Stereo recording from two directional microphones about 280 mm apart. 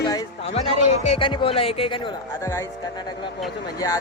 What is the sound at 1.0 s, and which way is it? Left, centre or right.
Speech, left.